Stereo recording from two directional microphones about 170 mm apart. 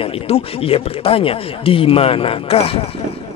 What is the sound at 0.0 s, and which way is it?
Speech, 35° left (ahead or behind).